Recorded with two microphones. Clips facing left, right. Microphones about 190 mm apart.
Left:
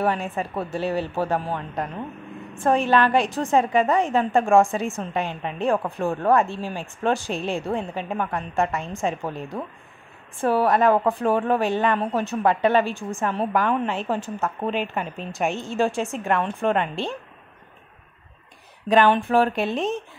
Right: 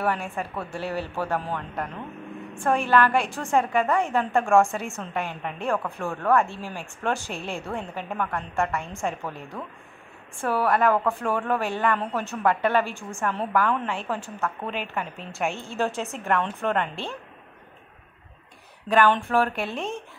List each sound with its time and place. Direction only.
0.0 s a woman's voice: 15° left (ahead or behind)
18.9 s a woman's voice: 15° left (ahead or behind)